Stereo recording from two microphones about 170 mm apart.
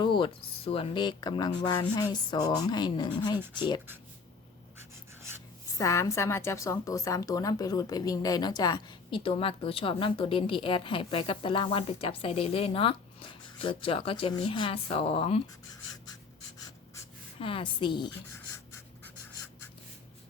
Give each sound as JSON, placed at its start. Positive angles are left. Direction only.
{"t": 0.0, "sound": "a woman's voice", "side_deg": 30}
{"t": 4.8, "sound": "writing", "side_deg": -15}
{"t": 5.7, "sound": "a woman's voice", "side_deg": 20}
{"t": 17.4, "sound": "a woman's voice", "side_deg": 30}